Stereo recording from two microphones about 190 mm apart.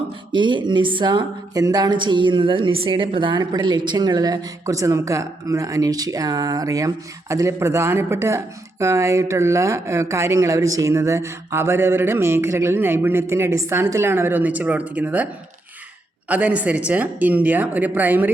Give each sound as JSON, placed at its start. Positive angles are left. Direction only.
{"t": 0.3, "sound": "a woman's voice", "side_deg": -25}
{"t": 16.3, "sound": "speech", "side_deg": -10}